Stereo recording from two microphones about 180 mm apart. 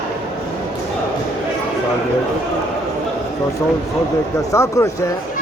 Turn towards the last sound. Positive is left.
turn(degrees=15)  # may be behind; listen again after turning